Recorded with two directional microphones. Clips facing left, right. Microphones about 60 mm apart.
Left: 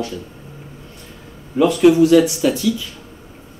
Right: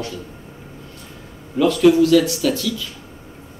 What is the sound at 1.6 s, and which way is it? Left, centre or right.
Speech, centre.